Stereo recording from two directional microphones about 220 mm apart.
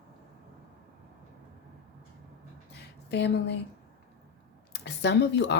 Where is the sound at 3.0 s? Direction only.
50° left (ahead or behind).